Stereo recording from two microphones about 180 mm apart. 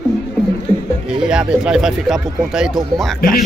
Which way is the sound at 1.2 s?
5° right (ahead or behind).